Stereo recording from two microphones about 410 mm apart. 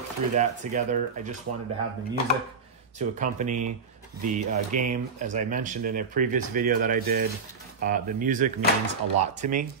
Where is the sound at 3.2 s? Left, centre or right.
Centre.